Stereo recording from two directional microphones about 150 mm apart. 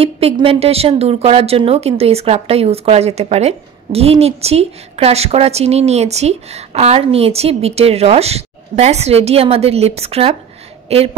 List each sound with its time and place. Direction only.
0.0 s a woman's voice: 40° right (ahead or behind)